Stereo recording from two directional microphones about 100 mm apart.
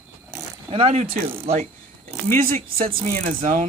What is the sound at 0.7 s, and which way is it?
Speech, 90° right.